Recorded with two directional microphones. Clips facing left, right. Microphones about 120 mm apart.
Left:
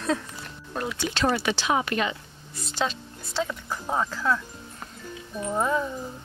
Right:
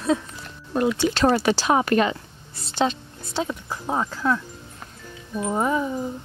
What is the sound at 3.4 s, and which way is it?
Speech, 15° right (ahead or behind).